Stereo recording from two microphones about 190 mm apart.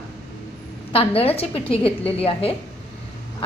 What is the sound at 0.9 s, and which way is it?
A woman's voice, 30° left (ahead or behind).